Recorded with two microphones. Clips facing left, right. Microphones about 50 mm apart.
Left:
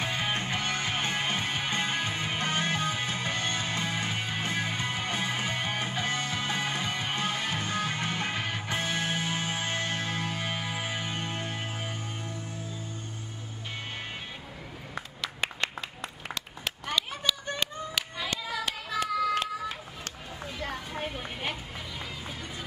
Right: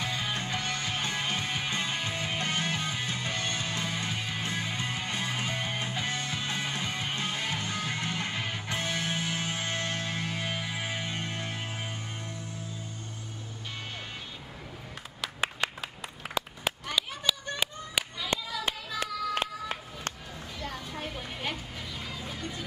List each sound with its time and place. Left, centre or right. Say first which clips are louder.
0.0 s music: left 2 dB; left
16.3 s clapping: right 7 dB; centre
18.9 s a sound: left 5 dB; right
20.9 s vehicle: left 2 dB; left